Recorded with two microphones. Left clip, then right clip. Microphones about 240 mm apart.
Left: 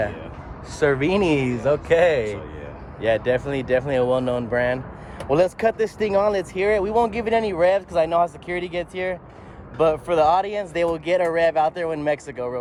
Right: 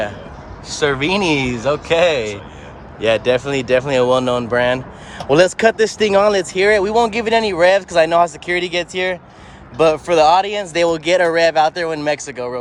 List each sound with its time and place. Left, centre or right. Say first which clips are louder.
0.8 s speech: right 3 dB; centre